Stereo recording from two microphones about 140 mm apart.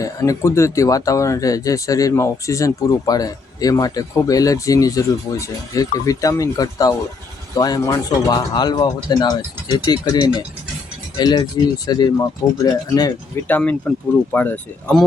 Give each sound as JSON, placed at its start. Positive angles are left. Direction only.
{"t": 0.0, "sound": "speech", "side_deg": 20}
{"t": 13.5, "sound": "speech", "side_deg": 10}